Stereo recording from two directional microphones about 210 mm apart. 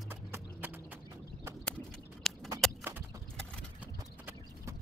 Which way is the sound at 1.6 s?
5° left (ahead or behind).